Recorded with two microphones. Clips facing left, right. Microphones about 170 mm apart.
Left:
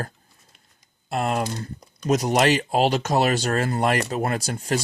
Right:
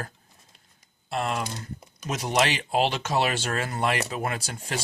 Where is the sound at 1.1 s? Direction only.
45° left (ahead or behind).